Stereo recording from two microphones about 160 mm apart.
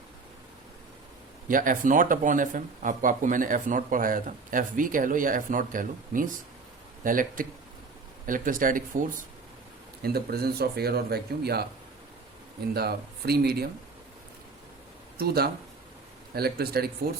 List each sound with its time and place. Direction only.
1.5 s speech: 60° right (ahead or behind)
10.0 s speech: 75° right (ahead or behind)
12.7 s speech: 80° right
15.2 s speech: 75° right (ahead or behind)